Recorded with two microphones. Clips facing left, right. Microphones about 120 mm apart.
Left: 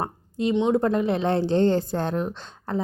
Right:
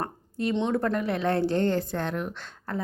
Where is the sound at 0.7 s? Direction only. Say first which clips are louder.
Left 5 dB; 25° left (ahead or behind).